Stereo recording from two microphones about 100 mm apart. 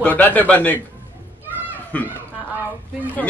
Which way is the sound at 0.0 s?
15° left (ahead or behind).